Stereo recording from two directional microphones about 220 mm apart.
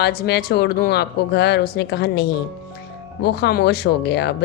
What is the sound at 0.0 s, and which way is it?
Speech, 45° left (ahead or behind).